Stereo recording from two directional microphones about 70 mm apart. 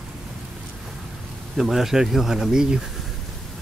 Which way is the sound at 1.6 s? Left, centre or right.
Centre.